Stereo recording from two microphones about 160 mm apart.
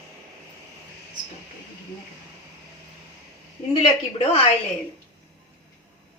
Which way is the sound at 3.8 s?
40° left (ahead or behind).